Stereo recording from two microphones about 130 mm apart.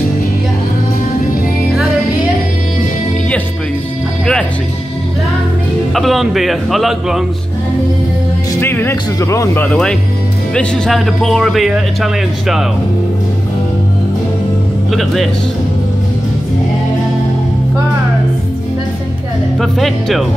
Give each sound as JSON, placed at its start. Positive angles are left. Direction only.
{"t": 5.9, "sound": "speech", "side_deg": 0}
{"t": 8.5, "sound": "speech", "side_deg": 15}
{"t": 14.9, "sound": "speech", "side_deg": 0}
{"t": 19.6, "sound": "speech", "side_deg": 0}